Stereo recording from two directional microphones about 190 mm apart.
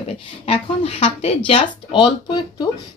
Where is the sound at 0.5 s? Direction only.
30° left (ahead or behind).